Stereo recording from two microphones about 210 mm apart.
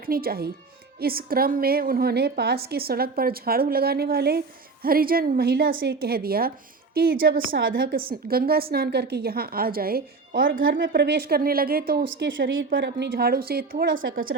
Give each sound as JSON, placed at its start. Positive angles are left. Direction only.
{"t": 0.0, "sound": "a woman's voice", "side_deg": -45}
{"t": 12.0, "sound": "a woman's voice", "side_deg": -60}
{"t": 12.7, "sound": "a woman's voice", "side_deg": -50}